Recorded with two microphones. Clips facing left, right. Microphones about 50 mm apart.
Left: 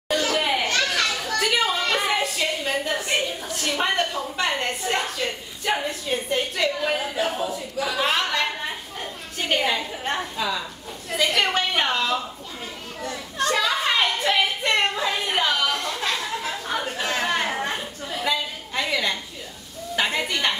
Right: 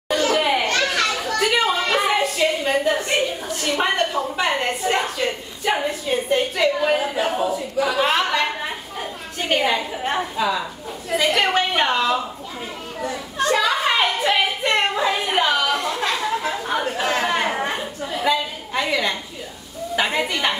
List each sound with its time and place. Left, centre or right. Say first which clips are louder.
0.1 s a child's voice: right 4 dB; centre
13.0 s a sound: right 3 dB; centre
20.0 s a woman's voice: right 2 dB; centre